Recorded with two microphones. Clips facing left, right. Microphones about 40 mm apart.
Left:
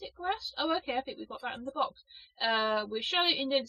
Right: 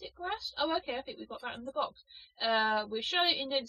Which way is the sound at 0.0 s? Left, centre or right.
Centre.